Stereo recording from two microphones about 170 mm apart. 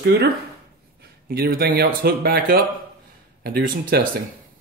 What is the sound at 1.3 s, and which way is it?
Speech, 65° right (ahead or behind).